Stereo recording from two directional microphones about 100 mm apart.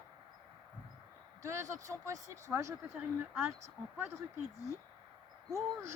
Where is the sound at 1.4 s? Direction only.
30° right (ahead or behind).